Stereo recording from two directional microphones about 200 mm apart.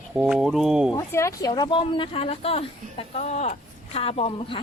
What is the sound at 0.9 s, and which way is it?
Speech, 15° left (ahead or behind).